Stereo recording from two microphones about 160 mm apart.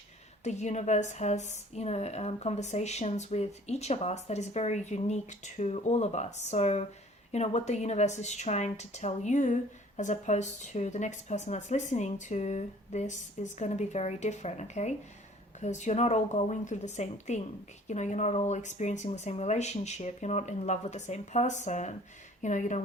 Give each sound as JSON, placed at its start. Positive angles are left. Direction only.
{"t": 0.4, "sound": "a woman's voice", "side_deg": 45}